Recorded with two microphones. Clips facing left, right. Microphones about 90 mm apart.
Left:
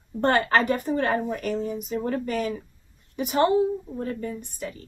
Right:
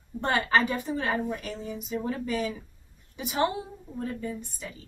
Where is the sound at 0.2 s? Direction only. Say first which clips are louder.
Left 4 dB; 50° left (ahead or behind).